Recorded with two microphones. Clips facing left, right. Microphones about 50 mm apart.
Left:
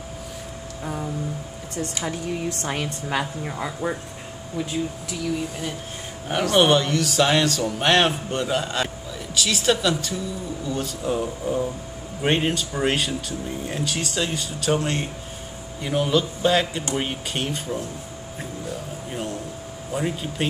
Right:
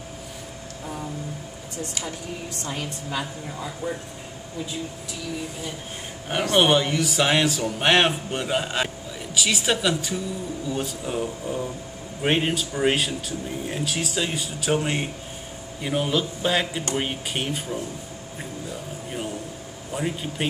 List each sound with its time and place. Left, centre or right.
2.0 s speech: left
6.5 s speech: centre
11.4 s speech: centre
19.9 s speech: centre